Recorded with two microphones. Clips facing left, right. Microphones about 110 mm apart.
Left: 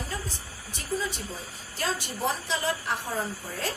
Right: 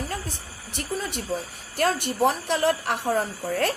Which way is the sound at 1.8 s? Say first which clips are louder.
Right 8 dB; 60° right (ahead or behind).